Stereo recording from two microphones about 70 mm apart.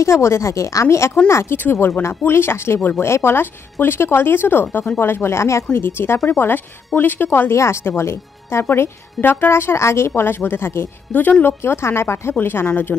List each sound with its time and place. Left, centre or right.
0.0 s a woman's voice: left
1.6 s speech: left
11.1 s a woman's voice: left